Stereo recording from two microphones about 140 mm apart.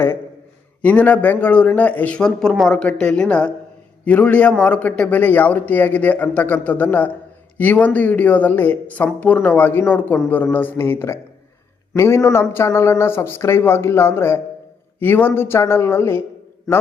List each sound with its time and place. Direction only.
0.8 s speech: 10° left (ahead or behind)